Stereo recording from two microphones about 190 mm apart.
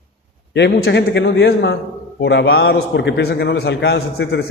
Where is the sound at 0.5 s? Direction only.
65° left (ahead or behind).